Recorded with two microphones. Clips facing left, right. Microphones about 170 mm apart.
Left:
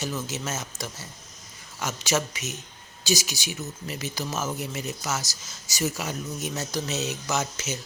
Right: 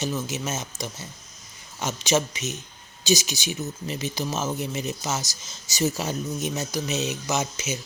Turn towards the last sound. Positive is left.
turn(degrees=-15)  # may be behind; listen again after turning